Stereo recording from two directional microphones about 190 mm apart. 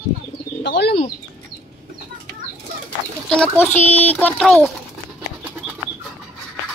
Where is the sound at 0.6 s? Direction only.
60° left (ahead or behind).